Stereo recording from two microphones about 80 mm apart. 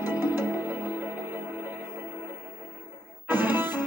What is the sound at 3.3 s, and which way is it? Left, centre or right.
Music, right.